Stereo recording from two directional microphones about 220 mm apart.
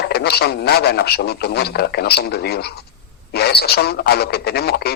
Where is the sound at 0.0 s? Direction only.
50° left (ahead or behind).